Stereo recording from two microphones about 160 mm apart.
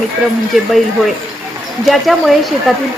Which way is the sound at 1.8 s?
Centre (ahead or behind).